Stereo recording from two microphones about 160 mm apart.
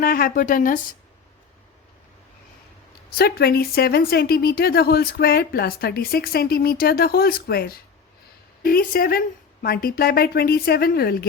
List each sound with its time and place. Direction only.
0.0 s speech: 65° left (ahead or behind)
3.2 s speech: 75° left (ahead or behind)
8.6 s speech: 60° left (ahead or behind)